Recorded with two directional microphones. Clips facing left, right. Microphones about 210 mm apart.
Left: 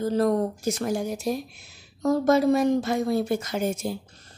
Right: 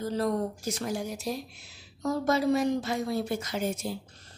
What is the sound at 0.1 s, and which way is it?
A woman's voice, 45° left (ahead or behind).